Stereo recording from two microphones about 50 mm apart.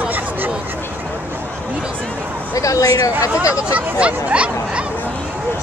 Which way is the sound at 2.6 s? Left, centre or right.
Left.